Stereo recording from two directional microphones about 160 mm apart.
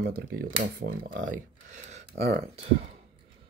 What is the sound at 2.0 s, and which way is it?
Speech, 80° right.